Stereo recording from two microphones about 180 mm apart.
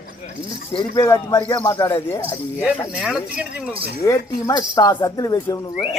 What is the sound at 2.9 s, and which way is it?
Speech, 5° right (ahead or behind).